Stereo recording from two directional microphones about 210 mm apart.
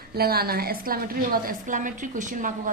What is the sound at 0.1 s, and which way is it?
A woman's voice, 45° right (ahead or behind).